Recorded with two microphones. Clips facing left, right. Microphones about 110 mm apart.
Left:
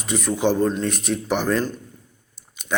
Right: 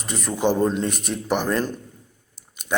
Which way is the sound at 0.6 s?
20° right (ahead or behind).